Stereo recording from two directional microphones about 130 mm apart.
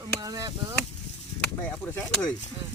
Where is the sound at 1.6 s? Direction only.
5° left (ahead or behind).